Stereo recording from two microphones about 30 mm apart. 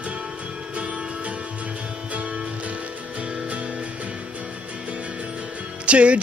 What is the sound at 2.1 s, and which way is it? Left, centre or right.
Music, right.